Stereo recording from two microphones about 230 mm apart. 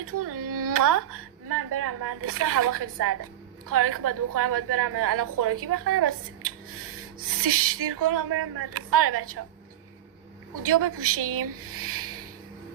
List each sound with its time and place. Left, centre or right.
0.0 s a woman's voice: right
10.6 s a woman's voice: right